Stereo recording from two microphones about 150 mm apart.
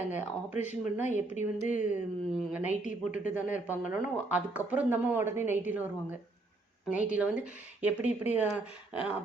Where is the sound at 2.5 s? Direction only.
10° right (ahead or behind).